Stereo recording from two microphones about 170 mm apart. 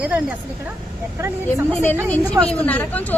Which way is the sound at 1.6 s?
10° left (ahead or behind).